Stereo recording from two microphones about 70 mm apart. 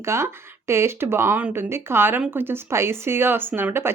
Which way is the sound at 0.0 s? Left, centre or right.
Right.